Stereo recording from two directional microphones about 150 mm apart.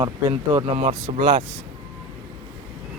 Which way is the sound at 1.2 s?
35° right (ahead or behind).